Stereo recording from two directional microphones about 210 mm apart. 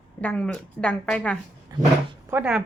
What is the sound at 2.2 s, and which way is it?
Speech, 5° right (ahead or behind).